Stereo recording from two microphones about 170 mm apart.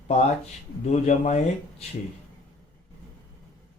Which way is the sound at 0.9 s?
40° left (ahead or behind).